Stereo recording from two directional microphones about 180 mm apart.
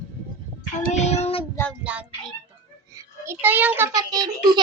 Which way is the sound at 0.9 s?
40° left (ahead or behind).